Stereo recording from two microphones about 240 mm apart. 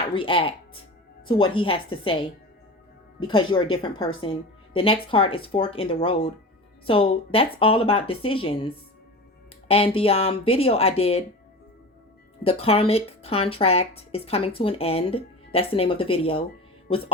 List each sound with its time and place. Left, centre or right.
0.1 s speech: left
12.4 s speech: left